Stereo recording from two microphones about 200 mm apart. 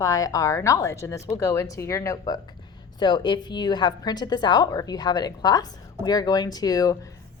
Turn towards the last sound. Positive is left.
turn(degrees=15)  # may be behind; listen again after turning